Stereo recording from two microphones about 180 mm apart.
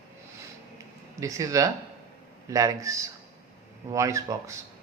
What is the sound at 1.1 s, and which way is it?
Speech, 20° right (ahead or behind).